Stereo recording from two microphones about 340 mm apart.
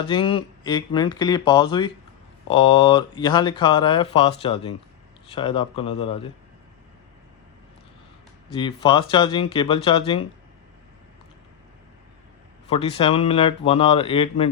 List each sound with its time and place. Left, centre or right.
0.0 s speech: centre
8.5 s speech: centre
12.7 s speech: centre